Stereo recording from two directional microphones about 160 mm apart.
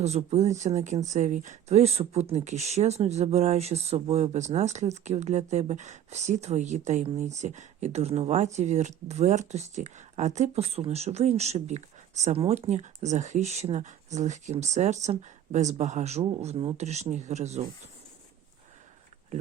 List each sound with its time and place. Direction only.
0.0 s speech: 40° right (ahead or behind)